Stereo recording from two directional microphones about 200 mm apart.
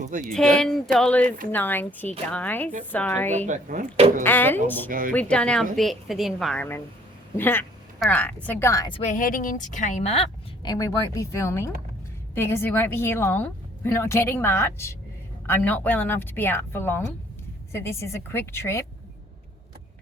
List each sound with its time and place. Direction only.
0.0 s speech: 40° right (ahead or behind)
0.3 s a woman's voice: 5° left (ahead or behind)
3.3 s speech: 35° right (ahead or behind)
4.2 s speech: 10° left (ahead or behind)
4.9 s speech: 45° right (ahead or behind)
5.1 s a woman's voice: 5° left (ahead or behind)
7.3 s a sound: 10° left (ahead or behind)
8.0 s speech: 5° left (ahead or behind)
9.0 s a woman's voice: 40° left (ahead or behind)
10.6 s speech: 15° left (ahead or behind)